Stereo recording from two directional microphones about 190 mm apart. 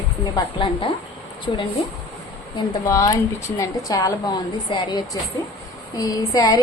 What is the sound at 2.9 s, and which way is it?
A woman's voice, 15° left (ahead or behind).